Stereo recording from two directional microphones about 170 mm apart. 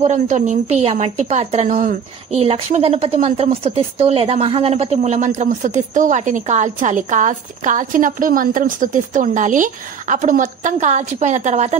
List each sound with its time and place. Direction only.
0.0 s a woman's voice: 45° right (ahead or behind)
2.3 s a woman's voice: 35° right (ahead or behind)